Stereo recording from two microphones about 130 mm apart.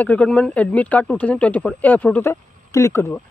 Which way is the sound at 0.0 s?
10° left (ahead or behind).